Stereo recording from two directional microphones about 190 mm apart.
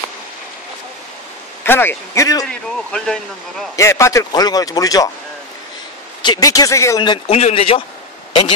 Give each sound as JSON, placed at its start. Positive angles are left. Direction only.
{"t": 1.6, "sound": "speech", "side_deg": 10}
{"t": 2.4, "sound": "speech", "side_deg": 5}
{"t": 3.7, "sound": "a man's voice", "side_deg": 15}
{"t": 6.2, "sound": "a man's voice", "side_deg": 20}